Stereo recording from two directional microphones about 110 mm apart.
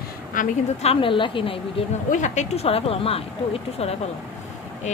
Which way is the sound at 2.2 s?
90° left.